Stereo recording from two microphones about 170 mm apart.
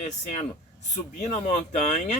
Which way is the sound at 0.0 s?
45° left (ahead or behind).